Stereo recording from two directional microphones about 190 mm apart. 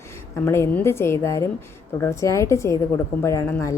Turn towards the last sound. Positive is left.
turn(degrees=15)  # may be behind; listen again after turning